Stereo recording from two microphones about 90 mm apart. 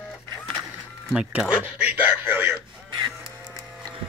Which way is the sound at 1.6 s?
20° right (ahead or behind).